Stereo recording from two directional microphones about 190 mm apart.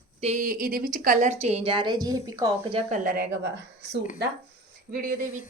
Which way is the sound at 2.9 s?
50° right (ahead or behind).